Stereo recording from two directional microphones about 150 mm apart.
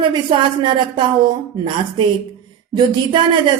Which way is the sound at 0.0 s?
30° right (ahead or behind).